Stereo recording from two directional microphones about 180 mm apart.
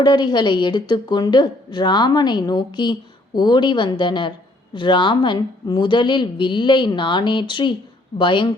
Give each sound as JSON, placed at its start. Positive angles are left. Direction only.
{"t": 0.0, "sound": "a woman's voice", "side_deg": 25}